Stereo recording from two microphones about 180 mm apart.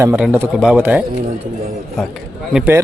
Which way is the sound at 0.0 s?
10° right (ahead or behind).